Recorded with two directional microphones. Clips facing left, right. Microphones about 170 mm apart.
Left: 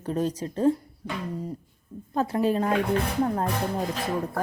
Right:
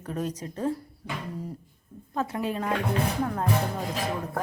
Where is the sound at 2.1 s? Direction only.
35° left (ahead or behind).